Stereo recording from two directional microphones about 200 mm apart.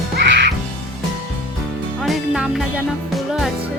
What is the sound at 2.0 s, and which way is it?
Music, centre (ahead or behind).